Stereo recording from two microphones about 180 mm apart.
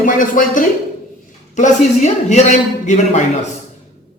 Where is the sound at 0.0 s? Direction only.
50° left (ahead or behind).